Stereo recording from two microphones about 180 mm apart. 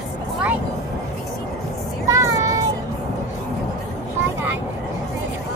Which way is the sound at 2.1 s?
15° right (ahead or behind).